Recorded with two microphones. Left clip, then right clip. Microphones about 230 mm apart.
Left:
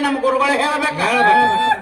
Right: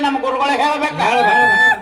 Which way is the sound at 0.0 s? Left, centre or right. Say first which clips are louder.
Even; left.